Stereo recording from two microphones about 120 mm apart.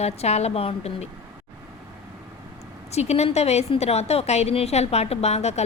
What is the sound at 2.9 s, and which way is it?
A woman's voice, 65° left (ahead or behind).